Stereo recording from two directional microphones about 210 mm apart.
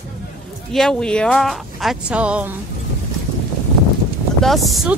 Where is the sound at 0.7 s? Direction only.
5° left (ahead or behind).